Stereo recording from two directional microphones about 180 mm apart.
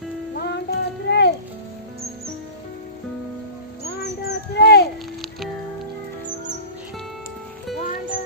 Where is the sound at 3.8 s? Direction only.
65° left (ahead or behind).